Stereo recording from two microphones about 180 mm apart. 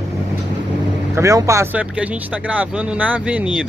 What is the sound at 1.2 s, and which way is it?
Speech, 15° right (ahead or behind).